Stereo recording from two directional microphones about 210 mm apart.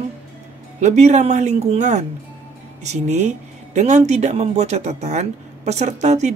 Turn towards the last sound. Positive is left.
turn(degrees=-35)  # may be behind; listen again after turning